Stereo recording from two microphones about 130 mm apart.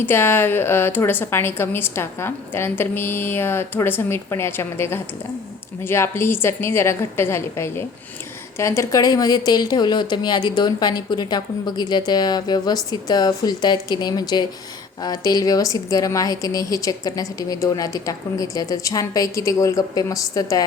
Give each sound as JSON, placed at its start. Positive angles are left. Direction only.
{"t": 0.0, "sound": "a woman's voice", "side_deg": 15}